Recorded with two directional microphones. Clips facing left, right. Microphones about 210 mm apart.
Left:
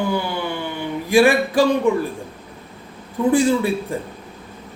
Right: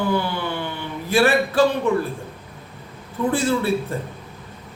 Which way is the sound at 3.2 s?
15° left (ahead or behind).